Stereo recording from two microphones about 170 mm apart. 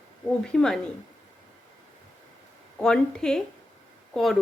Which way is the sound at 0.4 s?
5° left (ahead or behind).